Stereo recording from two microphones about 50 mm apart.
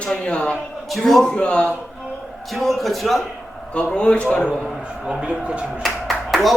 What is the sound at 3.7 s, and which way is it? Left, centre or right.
Speech, centre.